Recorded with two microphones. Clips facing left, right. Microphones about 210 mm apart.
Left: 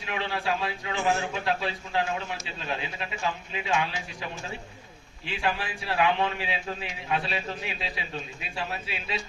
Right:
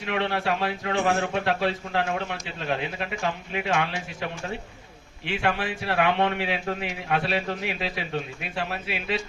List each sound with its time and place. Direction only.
0.0 s a man's voice: 65° right (ahead or behind)
5.2 s a man's voice: 70° right (ahead or behind)